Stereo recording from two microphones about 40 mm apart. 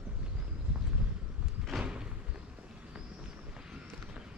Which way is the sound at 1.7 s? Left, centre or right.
Right.